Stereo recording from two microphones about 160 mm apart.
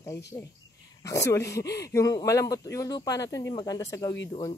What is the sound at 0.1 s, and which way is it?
Speech, 90° left.